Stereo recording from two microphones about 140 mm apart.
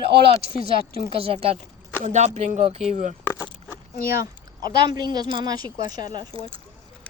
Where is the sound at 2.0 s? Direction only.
55° right (ahead or behind).